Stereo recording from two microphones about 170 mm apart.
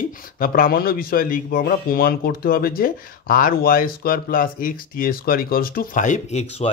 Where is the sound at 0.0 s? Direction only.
55° left (ahead or behind).